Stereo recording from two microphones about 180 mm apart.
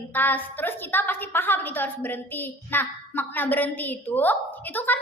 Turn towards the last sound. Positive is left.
turn(degrees=10)  # may be behind; listen again after turning